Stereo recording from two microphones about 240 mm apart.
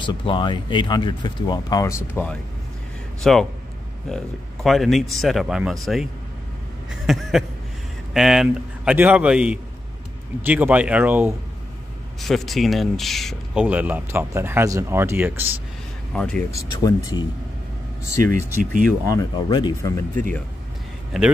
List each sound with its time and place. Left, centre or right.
0.0 s speech: centre
4.6 s a man's voice: centre
6.9 s a sound: centre
8.1 s a man's voice: centre
16.1 s speech: centre
18.2 s speech: right
19.0 s speech: centre